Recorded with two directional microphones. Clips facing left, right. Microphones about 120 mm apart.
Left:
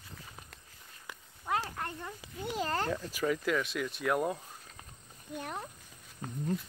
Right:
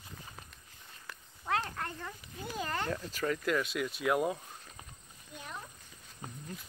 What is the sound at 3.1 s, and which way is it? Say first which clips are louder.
Speech: even; 10° left (ahead or behind).